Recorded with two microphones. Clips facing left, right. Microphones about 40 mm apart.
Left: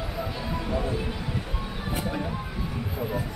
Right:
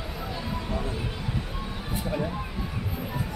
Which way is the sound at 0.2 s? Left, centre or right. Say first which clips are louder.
Left 2 dB; centre.